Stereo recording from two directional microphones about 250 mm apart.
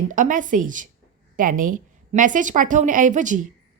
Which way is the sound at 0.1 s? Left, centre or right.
Right.